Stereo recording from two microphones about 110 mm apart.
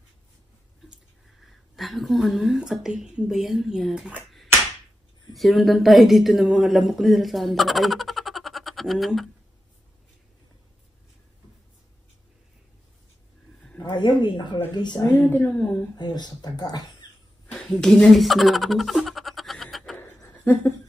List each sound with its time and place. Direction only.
1.4 s a woman's voice: centre (ahead or behind)
5.3 s speech: centre (ahead or behind)
13.8 s speech: 45° left (ahead or behind)
15.1 s speech: 15° left (ahead or behind)
16.0 s speech: 40° left (ahead or behind)
17.5 s a sound: 5° left (ahead or behind)
20.0 s a sound: 25° left (ahead or behind)